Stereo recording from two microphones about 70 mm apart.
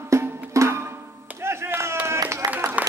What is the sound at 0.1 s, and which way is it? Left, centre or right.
Music, right.